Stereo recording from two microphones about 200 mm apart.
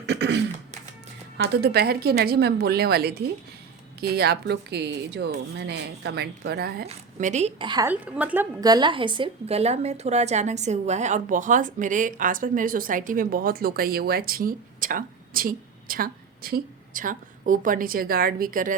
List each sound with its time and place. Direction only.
0.0 s throat clearing: 60° right (ahead or behind)
1.4 s a woman's voice: 55° right (ahead or behind)
6.8 s a woman's voice: 35° right (ahead or behind)
7.9 s a woman's voice: 5° right (ahead or behind)
8.6 s a woman's voice: 20° right (ahead or behind); by 18.8 s 40° right (ahead or behind)